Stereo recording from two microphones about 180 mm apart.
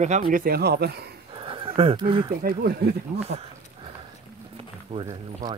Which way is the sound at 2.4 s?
55° right (ahead or behind).